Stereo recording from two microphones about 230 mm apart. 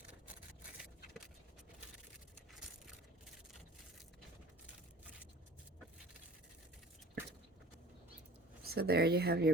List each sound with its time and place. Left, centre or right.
8.6 s speech: right